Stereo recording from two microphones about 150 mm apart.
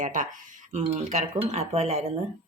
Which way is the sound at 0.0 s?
60° right (ahead or behind).